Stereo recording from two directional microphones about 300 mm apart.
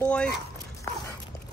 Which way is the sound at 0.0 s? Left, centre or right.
Centre.